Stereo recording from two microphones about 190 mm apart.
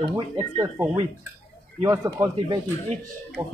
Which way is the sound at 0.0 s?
20° right (ahead or behind).